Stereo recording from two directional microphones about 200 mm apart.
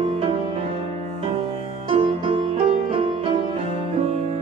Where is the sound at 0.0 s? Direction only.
30° right (ahead or behind).